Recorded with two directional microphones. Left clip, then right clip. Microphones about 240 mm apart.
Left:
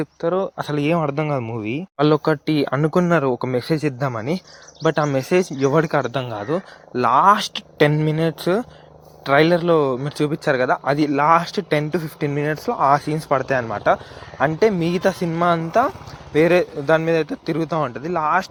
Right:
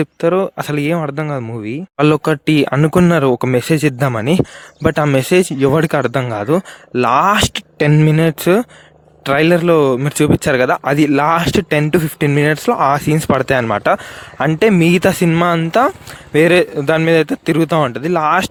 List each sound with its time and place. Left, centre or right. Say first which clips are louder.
0.0 s speech: right 7 dB; right; by 1.8 s centre
2.0 s speech: right 4 dB; right